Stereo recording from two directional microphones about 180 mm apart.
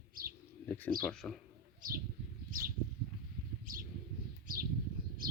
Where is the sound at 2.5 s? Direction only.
50° right (ahead or behind).